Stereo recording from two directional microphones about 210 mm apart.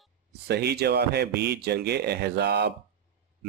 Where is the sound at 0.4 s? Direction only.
50° right (ahead or behind).